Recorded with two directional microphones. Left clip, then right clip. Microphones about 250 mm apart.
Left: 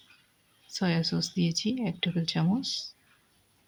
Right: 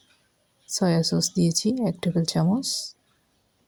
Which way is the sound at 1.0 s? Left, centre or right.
Centre.